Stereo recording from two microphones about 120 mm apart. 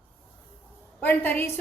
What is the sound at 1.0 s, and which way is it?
Speech, 15° left (ahead or behind).